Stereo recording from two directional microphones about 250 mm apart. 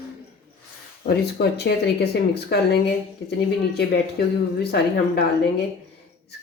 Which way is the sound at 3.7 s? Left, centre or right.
Left.